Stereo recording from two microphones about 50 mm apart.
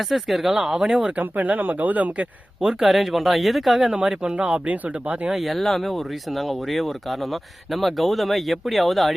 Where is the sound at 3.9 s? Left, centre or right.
Centre.